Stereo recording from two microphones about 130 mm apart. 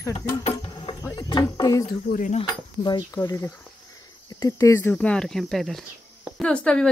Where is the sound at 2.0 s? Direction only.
80° left.